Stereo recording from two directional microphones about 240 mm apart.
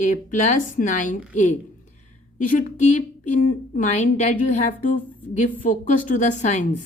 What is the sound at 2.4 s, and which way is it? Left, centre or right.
A woman's voice, left.